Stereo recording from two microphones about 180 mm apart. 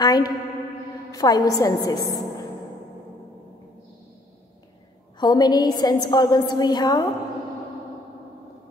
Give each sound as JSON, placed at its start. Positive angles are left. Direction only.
{"t": 0.0, "sound": "a woman's voice", "side_deg": 20}
{"t": 5.2, "sound": "a woman's voice", "side_deg": 20}